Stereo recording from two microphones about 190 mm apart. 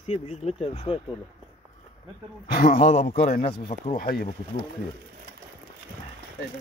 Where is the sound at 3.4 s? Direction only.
30° left (ahead or behind).